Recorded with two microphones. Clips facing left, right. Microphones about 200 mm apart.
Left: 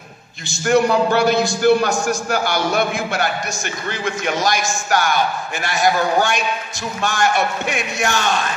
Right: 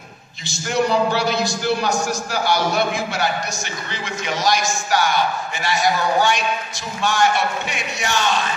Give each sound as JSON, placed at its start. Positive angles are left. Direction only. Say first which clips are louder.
{"t": 0.5, "sound": "a man's voice", "louder": "left 4 dB", "side_deg": 50}